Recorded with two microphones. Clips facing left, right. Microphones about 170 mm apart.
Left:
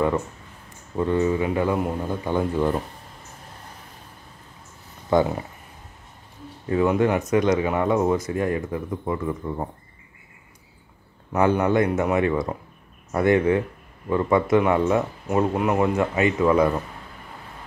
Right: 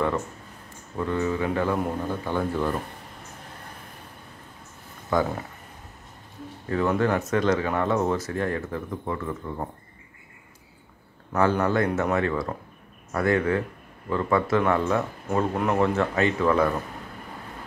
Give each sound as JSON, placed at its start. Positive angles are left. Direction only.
{"t": 0.9, "sound": "a man's voice", "side_deg": 20}
{"t": 5.1, "sound": "speech", "side_deg": 25}
{"t": 6.7, "sound": "a man's voice", "side_deg": 15}
{"t": 11.3, "sound": "a man's voice", "side_deg": 15}